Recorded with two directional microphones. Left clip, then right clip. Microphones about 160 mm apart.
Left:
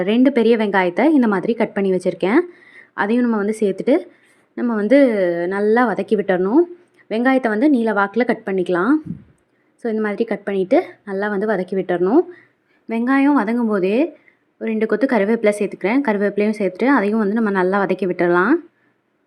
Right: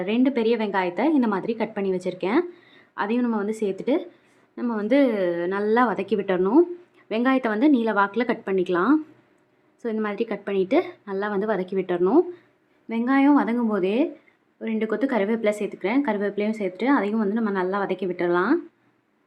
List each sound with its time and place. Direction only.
0.0 s a woman's voice: 35° left (ahead or behind)